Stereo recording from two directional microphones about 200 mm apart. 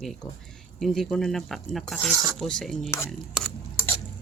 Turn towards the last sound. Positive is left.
turn(degrees=0)  # may be behind; listen again after turning